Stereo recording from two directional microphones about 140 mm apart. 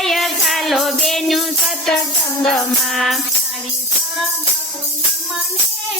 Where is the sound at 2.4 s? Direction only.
5° left (ahead or behind).